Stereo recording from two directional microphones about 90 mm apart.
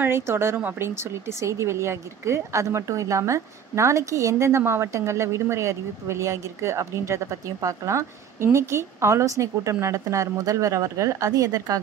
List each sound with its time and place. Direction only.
0.0 s a woman's voice: 30° right (ahead or behind)